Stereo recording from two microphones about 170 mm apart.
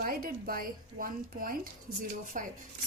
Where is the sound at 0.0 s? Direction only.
60° right (ahead or behind).